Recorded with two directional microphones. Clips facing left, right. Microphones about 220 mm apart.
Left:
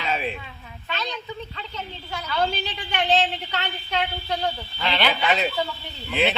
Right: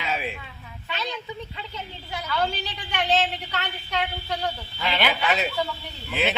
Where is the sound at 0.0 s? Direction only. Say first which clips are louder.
Left 2 dB; 10° right (ahead or behind).